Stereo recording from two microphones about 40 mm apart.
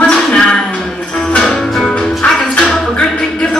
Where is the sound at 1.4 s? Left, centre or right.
Centre.